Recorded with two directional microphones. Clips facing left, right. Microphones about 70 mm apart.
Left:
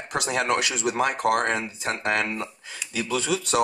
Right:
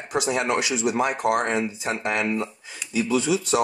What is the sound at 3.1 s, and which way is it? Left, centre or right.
Speech, left.